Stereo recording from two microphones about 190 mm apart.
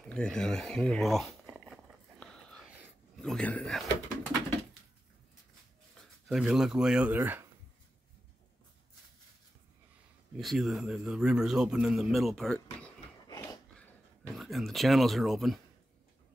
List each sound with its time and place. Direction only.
0.0 s a man's voice: 5° left (ahead or behind)
1.5 s a sound: centre (ahead or behind)
3.2 s a man's voice: 5° left (ahead or behind)
6.2 s a man's voice: centre (ahead or behind)
10.3 s a man's voice: centre (ahead or behind)
13.3 s dog: 20° left (ahead or behind)
13.7 s a sound: 5° left (ahead or behind)